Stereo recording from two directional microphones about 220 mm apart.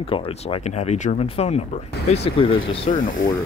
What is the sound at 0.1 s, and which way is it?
Speech, 25° left (ahead or behind).